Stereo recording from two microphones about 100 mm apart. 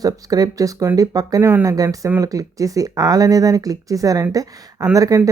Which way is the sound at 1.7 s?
35° right (ahead or behind).